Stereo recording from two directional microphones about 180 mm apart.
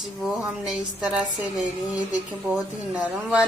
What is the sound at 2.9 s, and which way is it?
Speech, 10° right (ahead or behind).